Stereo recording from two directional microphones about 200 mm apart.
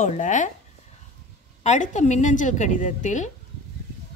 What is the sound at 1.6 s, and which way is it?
A woman's voice, 35° left (ahead or behind).